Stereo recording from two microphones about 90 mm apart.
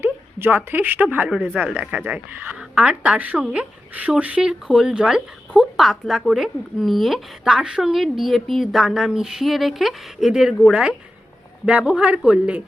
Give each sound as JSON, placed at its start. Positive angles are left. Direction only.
{"t": 0.0, "sound": "a woman's voice", "side_deg": -25}